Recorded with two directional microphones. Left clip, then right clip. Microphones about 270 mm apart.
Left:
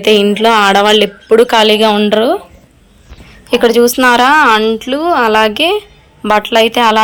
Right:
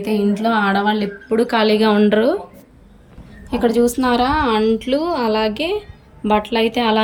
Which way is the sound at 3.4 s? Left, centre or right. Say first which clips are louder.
Left 8 dB; left.